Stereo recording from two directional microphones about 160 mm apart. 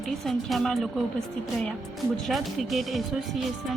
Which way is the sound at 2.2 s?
Centre (ahead or behind).